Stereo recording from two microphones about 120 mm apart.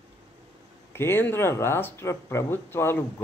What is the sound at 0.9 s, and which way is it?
Speech, 20° left (ahead or behind).